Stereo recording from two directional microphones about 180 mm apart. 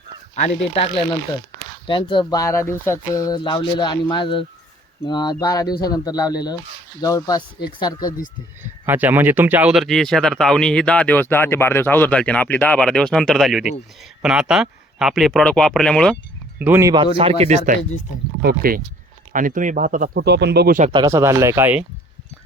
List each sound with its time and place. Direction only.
0.3 s speech: 35° left (ahead or behind)
8.9 s speech: 10° right (ahead or behind)
16.6 s speech: 10° right (ahead or behind)
16.9 s speech: 30° right (ahead or behind)
18.4 s speech: 55° right (ahead or behind)
20.9 s speech: 20° right (ahead or behind)